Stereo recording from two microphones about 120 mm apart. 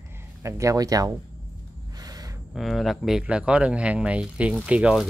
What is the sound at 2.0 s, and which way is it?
Gasp, 35° right (ahead or behind).